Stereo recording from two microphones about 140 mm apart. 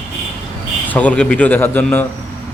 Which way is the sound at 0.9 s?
10° left (ahead or behind).